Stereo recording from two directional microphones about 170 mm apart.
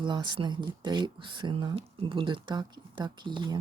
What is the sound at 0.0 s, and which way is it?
Speech, 25° right (ahead or behind).